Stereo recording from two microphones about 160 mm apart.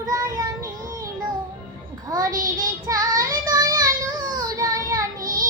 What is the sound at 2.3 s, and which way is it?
Child singing, 60° right (ahead or behind).